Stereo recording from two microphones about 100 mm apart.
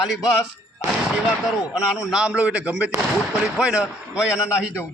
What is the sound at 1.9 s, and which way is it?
A man's voice, 5° right (ahead or behind).